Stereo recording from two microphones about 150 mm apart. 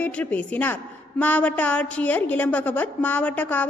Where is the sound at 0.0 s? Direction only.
10° left (ahead or behind).